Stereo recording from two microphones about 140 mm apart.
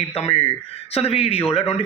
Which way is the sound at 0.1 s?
45° left (ahead or behind).